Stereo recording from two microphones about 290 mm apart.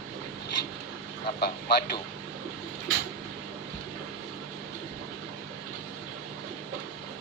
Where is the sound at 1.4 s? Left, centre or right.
Left.